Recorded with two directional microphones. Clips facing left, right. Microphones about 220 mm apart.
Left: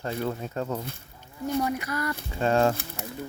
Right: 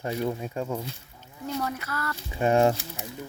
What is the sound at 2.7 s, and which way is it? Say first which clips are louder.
Pigeon: left 1 dB; 55° left (ahead or behind).